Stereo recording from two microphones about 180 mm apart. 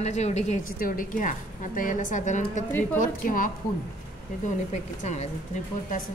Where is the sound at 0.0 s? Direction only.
40° left (ahead or behind).